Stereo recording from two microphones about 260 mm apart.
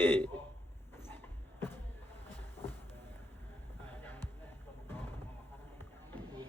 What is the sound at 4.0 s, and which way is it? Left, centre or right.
Music, centre.